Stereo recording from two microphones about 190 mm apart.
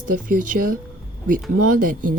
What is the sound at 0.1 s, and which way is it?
A woman's voice, 45° right (ahead or behind).